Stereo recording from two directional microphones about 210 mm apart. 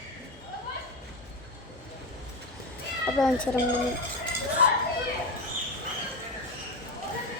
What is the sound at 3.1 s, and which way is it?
Speech, 5° left (ahead or behind).